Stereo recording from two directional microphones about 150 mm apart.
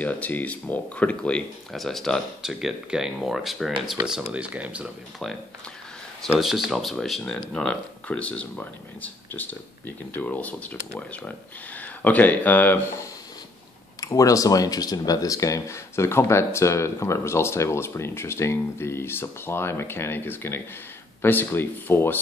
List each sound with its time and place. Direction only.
0.0 s speech: 10° left (ahead or behind)
6.4 s speech: centre (ahead or behind)
14.0 s speech: 20° left (ahead or behind)